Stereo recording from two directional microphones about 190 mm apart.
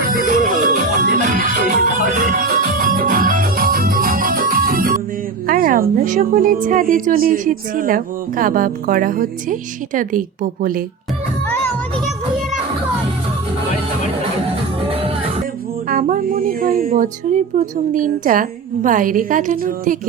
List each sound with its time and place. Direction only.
0.0 s music: 50° right (ahead or behind)
5.5 s a woman's voice: 50° right (ahead or behind)
14.8 s music: 30° right (ahead or behind)
15.9 s a woman's voice: 45° right (ahead or behind)